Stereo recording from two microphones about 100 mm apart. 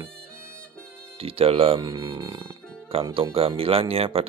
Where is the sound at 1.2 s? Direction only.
70° right (ahead or behind).